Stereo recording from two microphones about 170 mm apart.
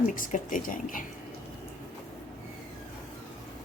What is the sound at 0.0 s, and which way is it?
Speech, 50° left (ahead or behind).